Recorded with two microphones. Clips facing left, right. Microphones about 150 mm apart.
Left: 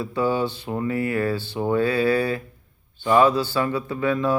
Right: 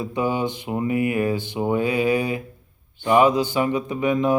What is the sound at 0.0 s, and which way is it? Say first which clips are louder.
Speech: even; 15° right (ahead or behind).